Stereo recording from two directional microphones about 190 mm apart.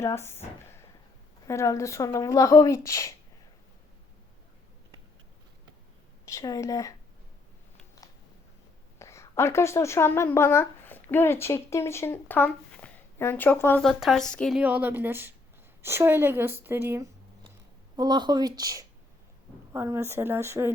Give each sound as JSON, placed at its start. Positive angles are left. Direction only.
{"t": 0.0, "sound": "speech", "side_deg": 15}
{"t": 6.2, "sound": "a woman's voice", "side_deg": 20}
{"t": 9.0, "sound": "speech", "side_deg": 15}
{"t": 14.6, "sound": "speech", "side_deg": -10}